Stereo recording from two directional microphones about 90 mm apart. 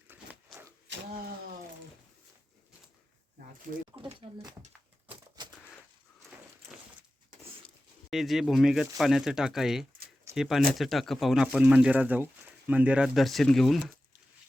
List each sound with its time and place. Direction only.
0.1 s a sound: 20° right (ahead or behind)
3.9 s speech: 55° right (ahead or behind)
8.1 s speech: centre (ahead or behind)
11.6 s speech: 15° right (ahead or behind)
13.1 s speech: centre (ahead or behind)